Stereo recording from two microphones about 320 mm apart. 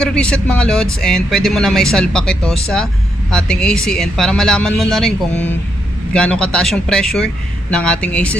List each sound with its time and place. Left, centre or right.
0.0 s speech: centre